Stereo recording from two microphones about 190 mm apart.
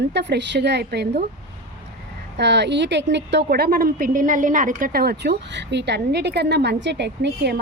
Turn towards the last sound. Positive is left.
turn(degrees=-65)  # may be behind; listen again after turning